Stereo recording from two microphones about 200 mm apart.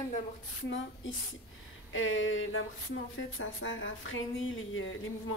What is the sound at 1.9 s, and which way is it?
Speech, 75° left (ahead or behind).